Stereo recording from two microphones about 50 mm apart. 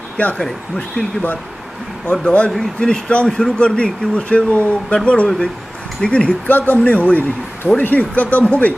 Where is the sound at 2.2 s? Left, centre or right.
Left.